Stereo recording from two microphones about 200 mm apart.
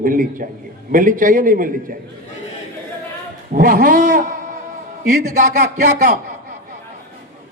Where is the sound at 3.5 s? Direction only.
40° right (ahead or behind).